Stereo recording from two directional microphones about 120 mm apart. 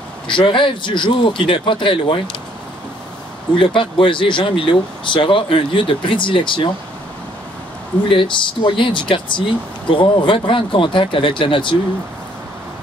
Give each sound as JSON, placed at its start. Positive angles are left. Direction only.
{"t": 0.3, "sound": "speech", "side_deg": 45}
{"t": 3.5, "sound": "speech", "side_deg": 45}
{"t": 8.1, "sound": "speech", "side_deg": 45}